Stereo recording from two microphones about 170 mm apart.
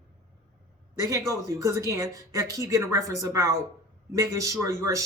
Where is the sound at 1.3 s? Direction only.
20° right (ahead or behind).